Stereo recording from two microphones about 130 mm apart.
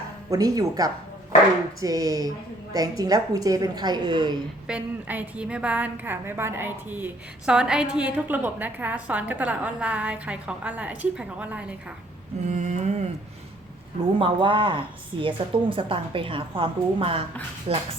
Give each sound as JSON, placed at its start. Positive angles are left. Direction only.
{"t": 0.3, "sound": "a woman's voice", "side_deg": -30}
{"t": 4.6, "sound": "a woman's voice", "side_deg": -10}
{"t": 12.5, "sound": "mantra", "side_deg": -60}
{"t": 14.2, "sound": "a woman's voice", "side_deg": -40}